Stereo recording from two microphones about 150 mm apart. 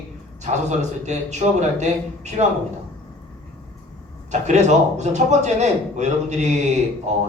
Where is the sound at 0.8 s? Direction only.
50° right (ahead or behind).